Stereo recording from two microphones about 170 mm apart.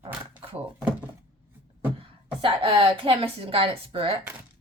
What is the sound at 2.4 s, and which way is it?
Speech, 30° right (ahead or behind).